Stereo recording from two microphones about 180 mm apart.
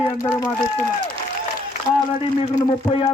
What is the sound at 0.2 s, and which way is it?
Speech, 15° left (ahead or behind).